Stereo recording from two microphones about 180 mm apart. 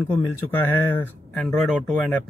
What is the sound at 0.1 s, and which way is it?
Speech, 10° left (ahead or behind).